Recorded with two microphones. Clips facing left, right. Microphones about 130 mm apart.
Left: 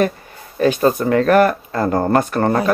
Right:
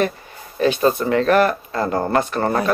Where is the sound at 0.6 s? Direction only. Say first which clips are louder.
Left 2 dB; 45° left (ahead or behind).